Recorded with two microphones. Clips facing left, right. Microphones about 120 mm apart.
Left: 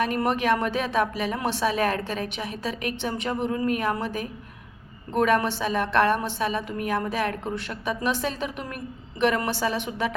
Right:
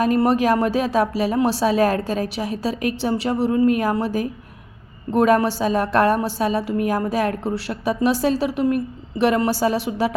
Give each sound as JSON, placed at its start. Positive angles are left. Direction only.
{"t": 0.0, "sound": "a woman's voice", "side_deg": -35}